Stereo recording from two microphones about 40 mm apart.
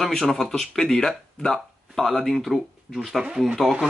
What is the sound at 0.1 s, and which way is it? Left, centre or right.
Speech, centre.